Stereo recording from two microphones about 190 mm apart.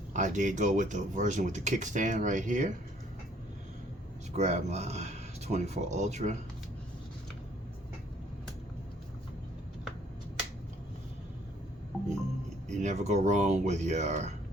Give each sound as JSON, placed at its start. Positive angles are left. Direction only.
{"t": 0.1, "sound": "speech", "side_deg": -40}
{"t": 4.4, "sound": "speech", "side_deg": -35}
{"t": 12.6, "sound": "speech", "side_deg": -40}